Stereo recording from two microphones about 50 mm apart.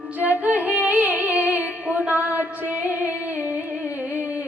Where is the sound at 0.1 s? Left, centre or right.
Right.